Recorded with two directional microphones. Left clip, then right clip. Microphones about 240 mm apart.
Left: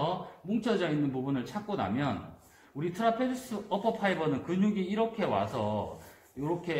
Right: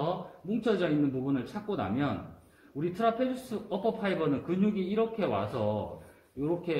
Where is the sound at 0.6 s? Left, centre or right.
Left.